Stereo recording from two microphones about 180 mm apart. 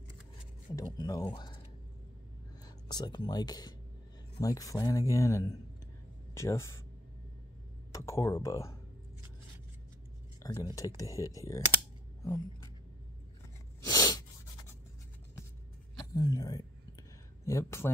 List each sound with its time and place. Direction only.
0.9 s speech: 20° left (ahead or behind)
2.6 s speech: 20° left (ahead or behind)
7.9 s speech: 15° left (ahead or behind)
10.4 s speech: 20° left (ahead or behind)
13.7 s sneeze: 20° left (ahead or behind)
16.0 s a sound: 20° left (ahead or behind)
17.5 s speech: 15° left (ahead or behind)